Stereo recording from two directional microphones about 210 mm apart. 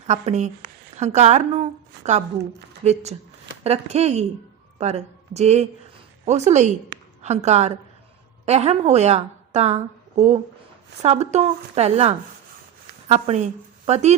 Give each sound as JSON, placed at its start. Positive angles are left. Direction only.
{"t": 0.1, "sound": "speech", "side_deg": -35}
{"t": 2.8, "sound": "a woman's voice", "side_deg": -30}